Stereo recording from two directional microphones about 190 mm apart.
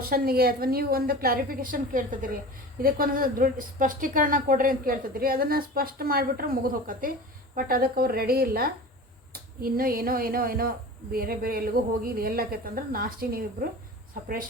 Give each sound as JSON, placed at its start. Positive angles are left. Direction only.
{"t": 0.1, "sound": "a woman's voice", "side_deg": -50}